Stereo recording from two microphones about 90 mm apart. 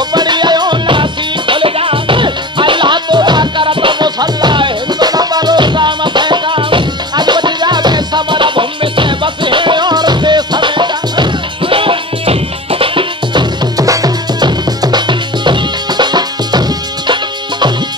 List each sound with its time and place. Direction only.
0.1 s music: 55° right (ahead or behind)
1.5 s music: 75° right (ahead or behind); by 13.8 s 55° right (ahead or behind)
13.8 s music: 45° right (ahead or behind)